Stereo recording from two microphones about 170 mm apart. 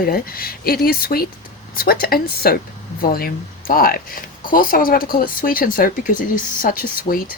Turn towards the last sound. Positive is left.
turn(degrees=55)  # may be behind; listen again after turning